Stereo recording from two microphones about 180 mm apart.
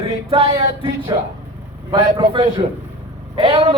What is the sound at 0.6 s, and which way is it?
Speech, 20° right (ahead or behind).